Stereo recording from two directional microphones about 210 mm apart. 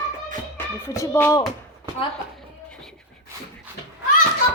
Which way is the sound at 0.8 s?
15° left (ahead or behind).